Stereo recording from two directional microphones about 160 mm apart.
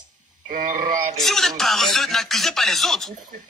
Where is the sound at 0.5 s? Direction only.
55° right (ahead or behind).